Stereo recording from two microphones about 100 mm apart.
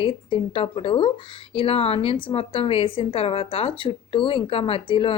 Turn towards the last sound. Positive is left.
turn(degrees=60)  # may be behind; listen again after turning